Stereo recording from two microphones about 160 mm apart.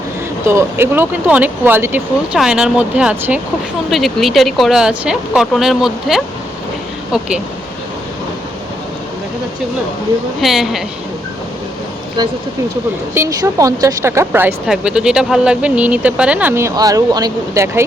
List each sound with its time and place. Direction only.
0.4 s speech: 15° right (ahead or behind)
10.4 s speech: centre (ahead or behind)
13.1 s speech: 20° right (ahead or behind)